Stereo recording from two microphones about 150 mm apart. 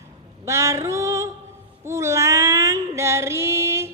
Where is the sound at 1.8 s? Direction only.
20° right (ahead or behind).